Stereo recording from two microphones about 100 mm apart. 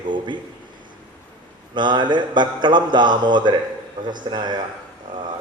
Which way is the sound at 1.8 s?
50° right (ahead or behind).